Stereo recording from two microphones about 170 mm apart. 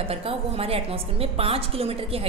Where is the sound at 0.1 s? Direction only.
35° right (ahead or behind).